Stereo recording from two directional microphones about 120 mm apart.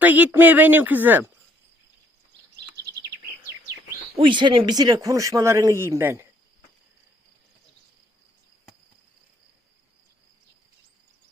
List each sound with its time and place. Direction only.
0.0 s speech: 15° right (ahead or behind)
4.2 s speech: 40° right (ahead or behind); by 6.2 s 20° right (ahead or behind)